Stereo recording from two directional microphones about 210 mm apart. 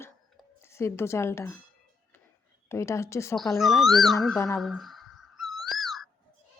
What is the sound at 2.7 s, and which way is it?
Speech, 15° left (ahead or behind).